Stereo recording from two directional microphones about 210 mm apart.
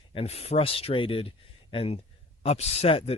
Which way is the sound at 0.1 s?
25° left (ahead or behind).